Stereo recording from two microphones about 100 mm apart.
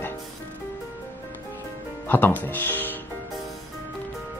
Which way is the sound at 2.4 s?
20° left (ahead or behind).